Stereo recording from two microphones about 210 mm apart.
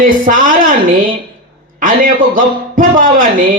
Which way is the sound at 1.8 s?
40° right (ahead or behind).